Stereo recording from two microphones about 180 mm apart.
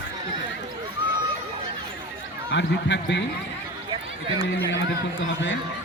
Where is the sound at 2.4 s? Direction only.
75° left (ahead or behind).